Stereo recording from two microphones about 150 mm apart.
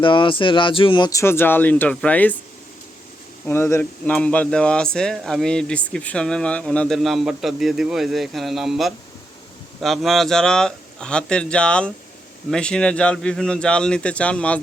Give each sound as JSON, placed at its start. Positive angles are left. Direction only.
{"t": 0.0, "sound": "speech", "side_deg": 35}
{"t": 1.2, "sound": "speech", "side_deg": 15}
{"t": 3.4, "sound": "speech", "side_deg": 15}